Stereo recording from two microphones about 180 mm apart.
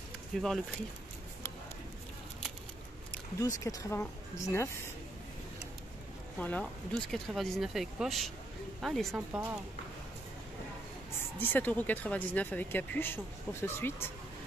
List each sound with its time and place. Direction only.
0.3 s speech: centre (ahead or behind)
3.3 s speech: 20° left (ahead or behind)
6.3 s speech: 10° left (ahead or behind)
11.3 s speech: 10° left (ahead or behind)